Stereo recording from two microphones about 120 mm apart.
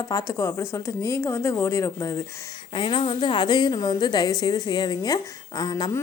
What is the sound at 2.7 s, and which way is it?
A woman's voice, 45° left (ahead or behind).